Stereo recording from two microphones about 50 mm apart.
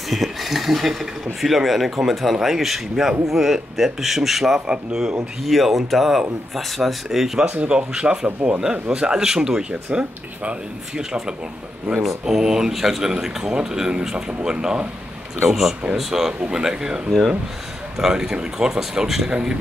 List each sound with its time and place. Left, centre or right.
0.1 s a sound: centre
1.4 s speech: centre
5.4 s speech: centre
7.4 s speech: right
11.0 s speech: centre
15.4 s speech: centre